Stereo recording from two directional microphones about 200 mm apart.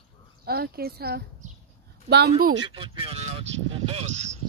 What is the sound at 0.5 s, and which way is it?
Speech, 50° right (ahead or behind).